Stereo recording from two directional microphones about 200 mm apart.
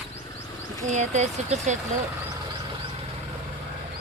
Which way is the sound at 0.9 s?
35° right (ahead or behind).